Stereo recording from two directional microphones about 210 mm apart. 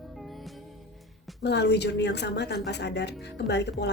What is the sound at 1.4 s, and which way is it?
Speech, 55° left (ahead or behind).